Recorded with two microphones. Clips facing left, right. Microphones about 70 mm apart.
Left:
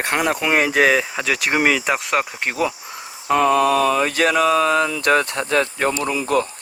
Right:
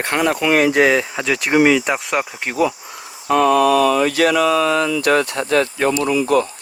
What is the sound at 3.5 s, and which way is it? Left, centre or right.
Speech, left.